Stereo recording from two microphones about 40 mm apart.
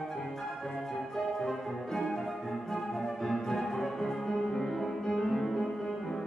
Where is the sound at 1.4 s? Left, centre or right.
Centre.